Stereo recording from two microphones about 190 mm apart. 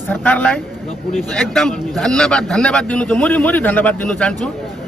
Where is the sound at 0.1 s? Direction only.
10° left (ahead or behind).